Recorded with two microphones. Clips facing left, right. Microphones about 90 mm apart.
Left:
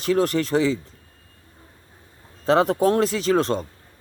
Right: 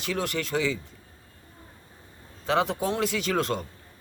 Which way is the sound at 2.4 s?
40° left (ahead or behind).